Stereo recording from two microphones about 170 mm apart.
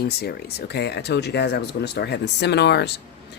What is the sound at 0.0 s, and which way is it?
Speech, 70° left (ahead or behind).